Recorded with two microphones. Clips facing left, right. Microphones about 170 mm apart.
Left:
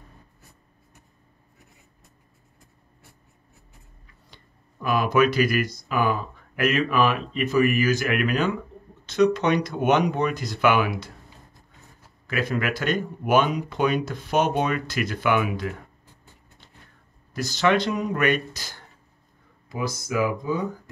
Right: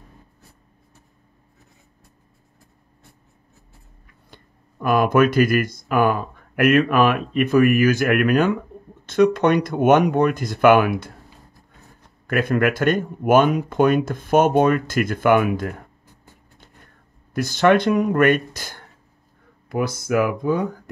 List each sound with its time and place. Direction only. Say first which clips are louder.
4.8 s speech: right 4 dB; 50° right (ahead or behind)
12.3 s speech: right 7 dB; 55° right (ahead or behind)
16.5 s a sound: right 3 dB; 50° right (ahead or behind)
19.7 s speech: right 6 dB; 60° right (ahead or behind)